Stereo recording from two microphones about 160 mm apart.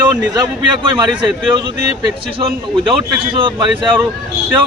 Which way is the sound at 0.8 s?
30° right (ahead or behind).